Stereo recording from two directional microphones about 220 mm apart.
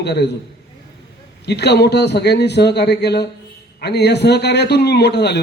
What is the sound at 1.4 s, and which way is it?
A man's voice, 50° left (ahead or behind).